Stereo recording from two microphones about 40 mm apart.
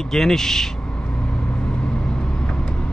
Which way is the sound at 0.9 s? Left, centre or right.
Left.